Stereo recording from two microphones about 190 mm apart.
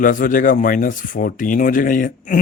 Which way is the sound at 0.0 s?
45° left (ahead or behind).